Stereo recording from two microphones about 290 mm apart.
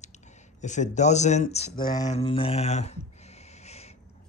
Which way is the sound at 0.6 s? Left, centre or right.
Left.